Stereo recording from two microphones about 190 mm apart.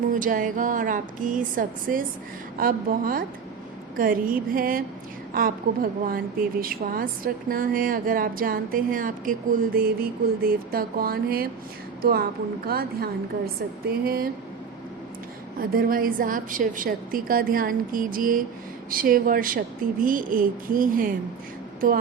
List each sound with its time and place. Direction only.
0.1 s speech: 45° right (ahead or behind)
12.6 s speech: 55° right (ahead or behind)
15.5 s speech: 50° right (ahead or behind)